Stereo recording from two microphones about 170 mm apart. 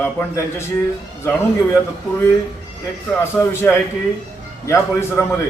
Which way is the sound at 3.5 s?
15° left (ahead or behind).